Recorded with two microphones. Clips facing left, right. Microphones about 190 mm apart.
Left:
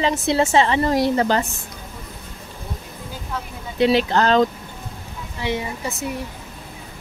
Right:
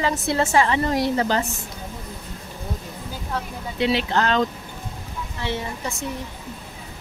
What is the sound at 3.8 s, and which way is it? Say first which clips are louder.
Speech: left 4 dB; 40° left (ahead or behind).